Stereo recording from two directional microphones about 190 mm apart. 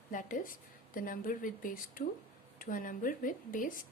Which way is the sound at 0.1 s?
45° left (ahead or behind).